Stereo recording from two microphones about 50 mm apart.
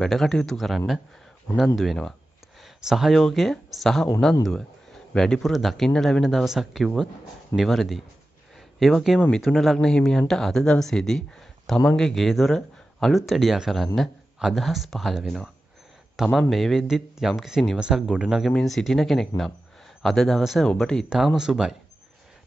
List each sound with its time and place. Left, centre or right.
0.0 s speech: centre
2.6 s a sound: centre
3.1 s speech: centre
5.4 s speech: centre
6.2 s speech: centre
9.9 s speech: centre
16.8 s speech: centre
17.7 s speech: centre
18.6 s speech: centre
21.4 s speech: centre